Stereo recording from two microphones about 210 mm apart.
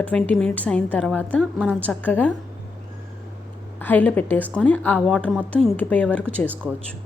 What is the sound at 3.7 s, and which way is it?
A woman's voice, 10° left (ahead or behind).